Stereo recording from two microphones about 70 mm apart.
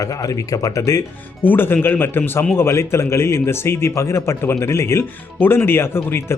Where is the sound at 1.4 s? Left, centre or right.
Left.